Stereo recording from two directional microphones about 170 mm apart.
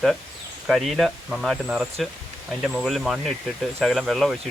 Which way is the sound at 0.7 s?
Centre (ahead or behind).